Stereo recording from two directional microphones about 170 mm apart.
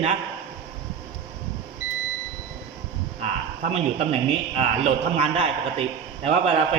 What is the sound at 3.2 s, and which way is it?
A man's voice, 45° right (ahead or behind).